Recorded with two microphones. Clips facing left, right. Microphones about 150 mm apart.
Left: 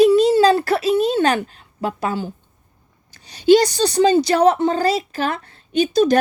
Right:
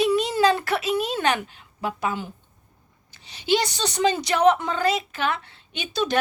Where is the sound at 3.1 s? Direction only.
40° left (ahead or behind).